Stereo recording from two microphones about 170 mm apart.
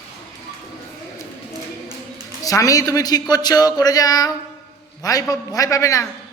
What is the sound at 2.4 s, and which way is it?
A man's voice, 20° left (ahead or behind).